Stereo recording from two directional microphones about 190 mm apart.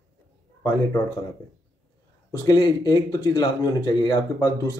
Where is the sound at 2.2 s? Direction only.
20° left (ahead or behind).